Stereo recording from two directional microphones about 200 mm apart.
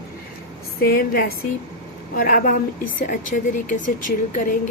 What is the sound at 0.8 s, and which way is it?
A woman's voice, 50° left (ahead or behind).